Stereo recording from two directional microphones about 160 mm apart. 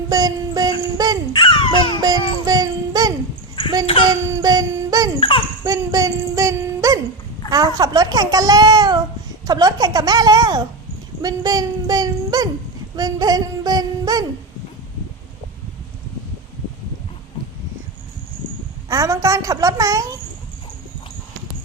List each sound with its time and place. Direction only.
0.1 s a child's voice: 25° right (ahead or behind)
0.9 s dog: 25° right (ahead or behind)
1.3 s dog: 30° left (ahead or behind)
2.0 s music: 25° right (ahead or behind)
5.6 s a sound: 20° right (ahead or behind)
7.5 s a child's voice: 25° right (ahead or behind)
11.2 s a sound: 25° right (ahead or behind)
18.9 s a child's voice: 20° right (ahead or behind)